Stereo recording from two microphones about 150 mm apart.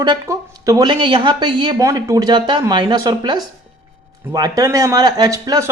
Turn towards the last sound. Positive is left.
turn(degrees=-20)  # may be behind; listen again after turning